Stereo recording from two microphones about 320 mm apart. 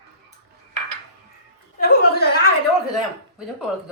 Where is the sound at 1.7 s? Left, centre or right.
Left.